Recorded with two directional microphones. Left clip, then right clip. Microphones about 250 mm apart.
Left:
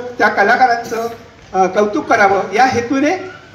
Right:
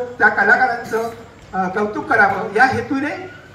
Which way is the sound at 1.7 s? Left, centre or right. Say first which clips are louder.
Left 4 dB; left.